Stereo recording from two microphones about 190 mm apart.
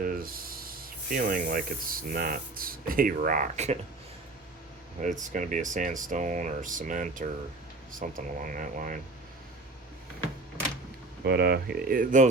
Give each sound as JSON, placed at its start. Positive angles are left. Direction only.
{"t": 0.0, "sound": "speech", "side_deg": -50}
{"t": 5.0, "sound": "speech", "side_deg": -35}
{"t": 11.3, "sound": "speech", "side_deg": -60}